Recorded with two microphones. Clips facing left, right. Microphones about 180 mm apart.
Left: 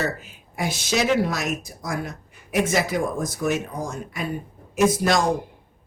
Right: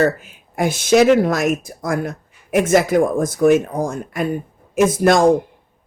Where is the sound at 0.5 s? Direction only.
50° right (ahead or behind).